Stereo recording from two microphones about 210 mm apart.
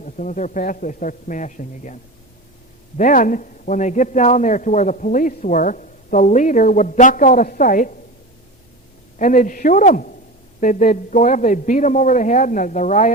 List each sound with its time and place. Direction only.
0.0 s a man's voice: 35° left (ahead or behind)
3.0 s a man's voice: 40° left (ahead or behind)
9.1 s a man's voice: 40° left (ahead or behind)